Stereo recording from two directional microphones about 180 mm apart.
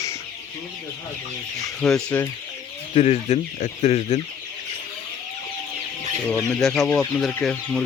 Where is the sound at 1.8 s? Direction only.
5° left (ahead or behind).